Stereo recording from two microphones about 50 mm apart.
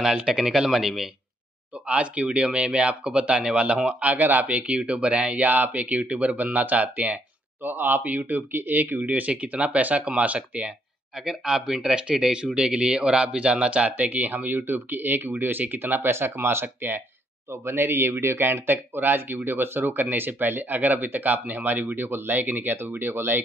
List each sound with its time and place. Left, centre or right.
0.2 s speech: centre
1.9 s speech: right
4.1 s speech: right
7.6 s speech: right
8.0 s speech: right
11.1 s speech: centre; by 17.0 s right
17.5 s speech: right
18.5 s speech: right
22.3 s speech: right